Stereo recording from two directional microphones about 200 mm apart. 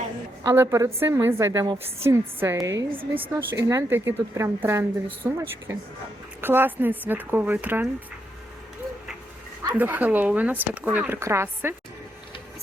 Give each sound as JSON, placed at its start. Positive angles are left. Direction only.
{"t": 0.4, "sound": "speech", "side_deg": -10}
{"t": 3.5, "sound": "speech", "side_deg": -15}
{"t": 9.7, "sound": "speech", "side_deg": -10}